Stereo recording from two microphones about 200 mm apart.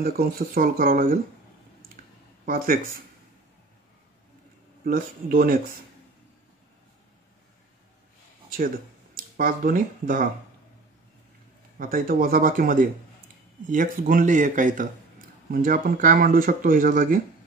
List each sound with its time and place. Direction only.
0.0 s speech: 45° right (ahead or behind)
2.4 s speech: 45° right (ahead or behind)
4.8 s speech: 45° right (ahead or behind)
9.1 s speech: 45° right (ahead or behind)
11.8 s speech: 45° right (ahead or behind)